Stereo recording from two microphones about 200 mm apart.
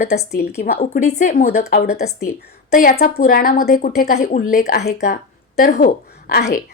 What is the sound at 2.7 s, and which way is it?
A woman's voice, 45° left (ahead or behind).